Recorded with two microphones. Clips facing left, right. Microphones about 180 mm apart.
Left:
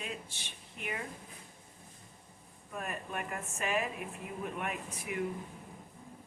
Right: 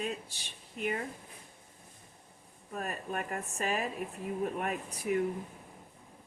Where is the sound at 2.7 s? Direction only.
40° right (ahead or behind).